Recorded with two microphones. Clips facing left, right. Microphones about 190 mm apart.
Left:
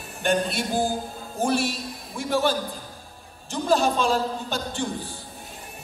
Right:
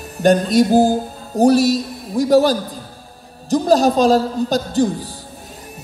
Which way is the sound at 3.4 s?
40° right (ahead or behind).